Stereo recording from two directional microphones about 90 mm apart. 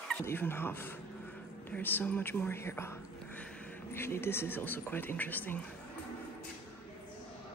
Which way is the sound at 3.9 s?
25° left (ahead or behind).